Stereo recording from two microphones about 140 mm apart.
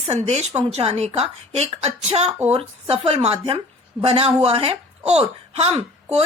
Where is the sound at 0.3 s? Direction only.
50° right (ahead or behind).